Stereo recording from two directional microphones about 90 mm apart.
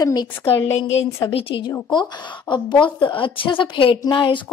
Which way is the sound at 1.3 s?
70° left (ahead or behind).